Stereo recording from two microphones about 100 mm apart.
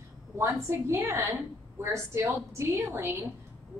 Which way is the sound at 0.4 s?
30° right (ahead or behind).